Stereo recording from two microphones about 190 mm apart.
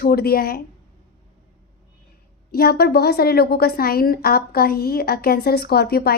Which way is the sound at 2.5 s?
55° left (ahead or behind).